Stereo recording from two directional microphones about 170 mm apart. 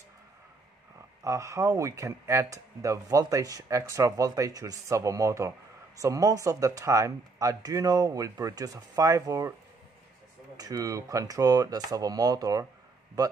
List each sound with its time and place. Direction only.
1.2 s speech: 20° right (ahead or behind)
10.6 s speech: 20° right (ahead or behind)